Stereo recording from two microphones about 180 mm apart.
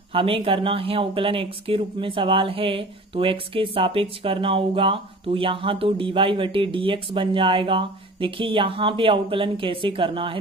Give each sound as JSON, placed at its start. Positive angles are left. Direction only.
{"t": 0.1, "sound": "speech", "side_deg": -30}